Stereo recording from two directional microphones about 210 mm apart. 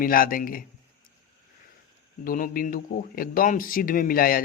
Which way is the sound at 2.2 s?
40° left (ahead or behind).